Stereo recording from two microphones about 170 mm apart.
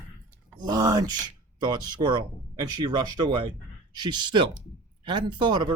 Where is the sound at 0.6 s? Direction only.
25° right (ahead or behind).